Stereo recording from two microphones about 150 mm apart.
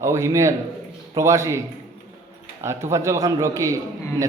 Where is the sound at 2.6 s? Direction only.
20° right (ahead or behind).